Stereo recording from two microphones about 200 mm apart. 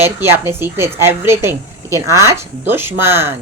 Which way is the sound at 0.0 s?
10° right (ahead or behind).